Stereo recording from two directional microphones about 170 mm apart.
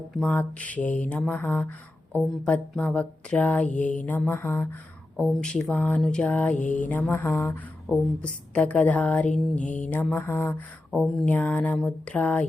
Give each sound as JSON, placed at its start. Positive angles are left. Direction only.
{"t": 0.1, "sound": "speech", "side_deg": 5}